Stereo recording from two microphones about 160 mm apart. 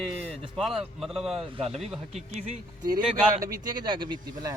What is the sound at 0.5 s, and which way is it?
A man's voice, centre (ahead or behind).